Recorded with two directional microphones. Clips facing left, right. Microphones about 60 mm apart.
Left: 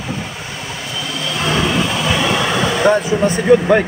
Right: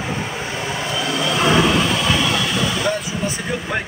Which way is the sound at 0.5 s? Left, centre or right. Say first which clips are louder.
Right 3 dB; right.